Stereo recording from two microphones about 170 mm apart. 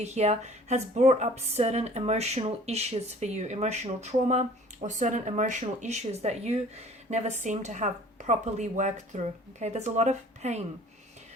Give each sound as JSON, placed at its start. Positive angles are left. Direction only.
{"t": 0.0, "sound": "speech", "side_deg": -40}